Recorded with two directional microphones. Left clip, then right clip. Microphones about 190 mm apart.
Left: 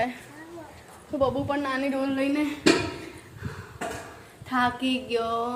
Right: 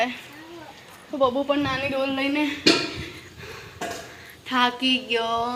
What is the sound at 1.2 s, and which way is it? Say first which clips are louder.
A woman's voice: right 4 dB; 20° right (ahead or behind).